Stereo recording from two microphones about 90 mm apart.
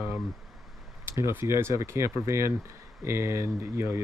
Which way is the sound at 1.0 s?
30° right (ahead or behind).